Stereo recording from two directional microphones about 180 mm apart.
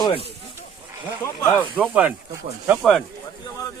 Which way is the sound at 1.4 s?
15° left (ahead or behind).